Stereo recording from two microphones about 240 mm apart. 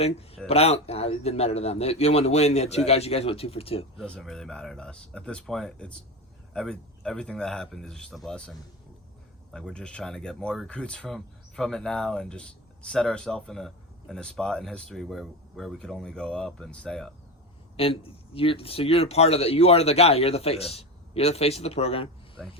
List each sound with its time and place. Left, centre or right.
0.0 s speech: left
3.9 s speech: centre
17.7 s speech: left